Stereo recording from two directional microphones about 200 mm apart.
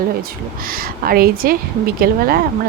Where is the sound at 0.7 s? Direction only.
45° right (ahead or behind).